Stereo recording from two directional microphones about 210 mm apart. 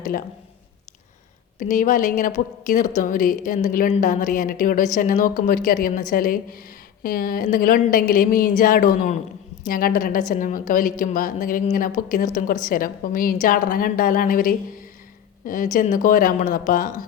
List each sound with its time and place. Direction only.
0.0 s a man's voice: 40° left (ahead or behind)
1.5 s a woman's voice: 35° left (ahead or behind)